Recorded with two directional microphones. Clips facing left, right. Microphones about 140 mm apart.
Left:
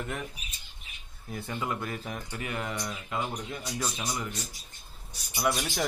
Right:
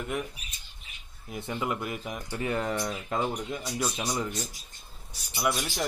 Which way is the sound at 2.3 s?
30° right (ahead or behind).